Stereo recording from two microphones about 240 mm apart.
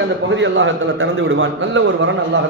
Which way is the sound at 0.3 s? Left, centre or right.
Right.